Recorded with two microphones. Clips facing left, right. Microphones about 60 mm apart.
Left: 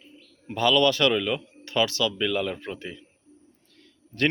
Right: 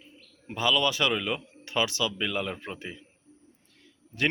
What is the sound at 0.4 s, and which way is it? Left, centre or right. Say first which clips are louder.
Speech: left 5 dB; centre.